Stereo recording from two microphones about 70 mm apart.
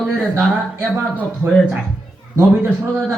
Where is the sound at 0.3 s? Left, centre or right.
Right.